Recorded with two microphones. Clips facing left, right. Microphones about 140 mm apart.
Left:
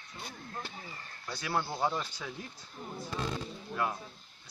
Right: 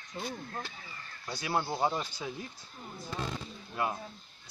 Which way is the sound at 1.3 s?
15° right (ahead or behind).